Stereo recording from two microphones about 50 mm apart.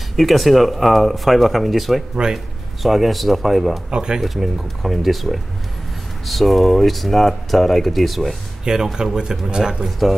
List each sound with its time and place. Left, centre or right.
0.1 s speech: centre
3.9 s speech: centre
4.2 s speech: centre
8.6 s speech: centre
9.8 s speech: centre